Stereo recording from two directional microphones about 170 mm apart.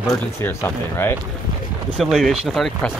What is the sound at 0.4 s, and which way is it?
Speech, 15° left (ahead or behind).